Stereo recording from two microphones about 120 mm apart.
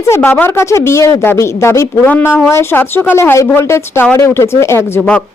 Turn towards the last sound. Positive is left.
turn(degrees=10)  # may be behind; listen again after turning